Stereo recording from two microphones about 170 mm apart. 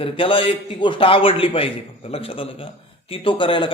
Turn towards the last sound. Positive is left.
turn(degrees=30)  # may be behind; listen again after turning